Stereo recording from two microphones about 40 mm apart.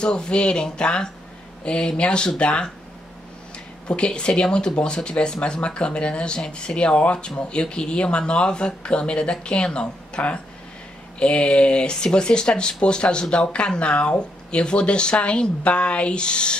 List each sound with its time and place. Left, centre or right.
0.0 s speech: left
3.8 s speech: left